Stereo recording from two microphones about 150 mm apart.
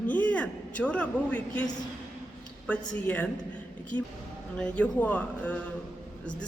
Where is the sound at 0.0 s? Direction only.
10° left (ahead or behind).